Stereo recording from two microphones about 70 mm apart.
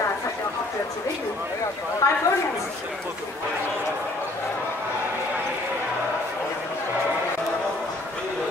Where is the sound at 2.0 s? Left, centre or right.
Left.